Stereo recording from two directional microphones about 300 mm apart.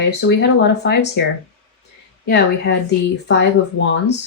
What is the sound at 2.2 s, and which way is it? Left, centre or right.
Speech, left.